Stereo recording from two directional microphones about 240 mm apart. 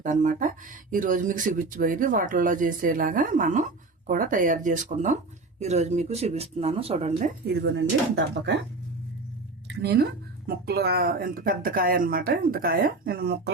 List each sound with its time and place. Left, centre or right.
0.0 s speech: right
7.4 s speech: right
9.8 s speech: right